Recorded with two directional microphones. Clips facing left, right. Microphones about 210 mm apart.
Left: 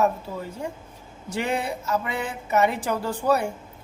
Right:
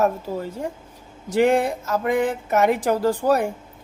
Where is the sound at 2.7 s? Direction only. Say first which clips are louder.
Right 7 dB; 90° right.